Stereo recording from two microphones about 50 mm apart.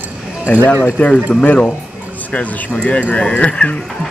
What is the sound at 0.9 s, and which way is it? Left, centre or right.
Speech, left.